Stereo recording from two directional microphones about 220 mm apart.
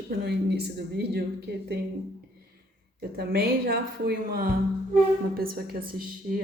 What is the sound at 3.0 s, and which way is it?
A woman's voice, 45° right (ahead or behind).